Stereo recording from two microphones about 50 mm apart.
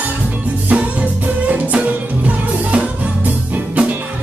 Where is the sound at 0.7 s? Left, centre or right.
Right.